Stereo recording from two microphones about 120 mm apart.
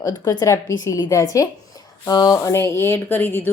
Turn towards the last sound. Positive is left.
turn(degrees=15)  # may be behind; listen again after turning